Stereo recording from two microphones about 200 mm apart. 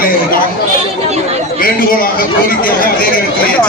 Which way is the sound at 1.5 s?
45° left (ahead or behind).